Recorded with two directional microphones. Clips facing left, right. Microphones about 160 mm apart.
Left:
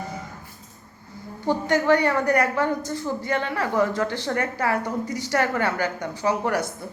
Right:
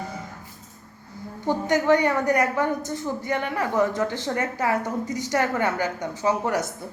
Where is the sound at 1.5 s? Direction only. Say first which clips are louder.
Even; 15° right (ahead or behind).